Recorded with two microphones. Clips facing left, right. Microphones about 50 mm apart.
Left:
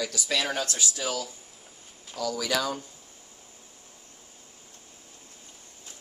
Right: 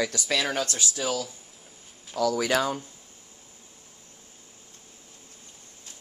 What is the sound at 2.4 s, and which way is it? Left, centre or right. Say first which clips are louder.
Speech: right 1 dB; right.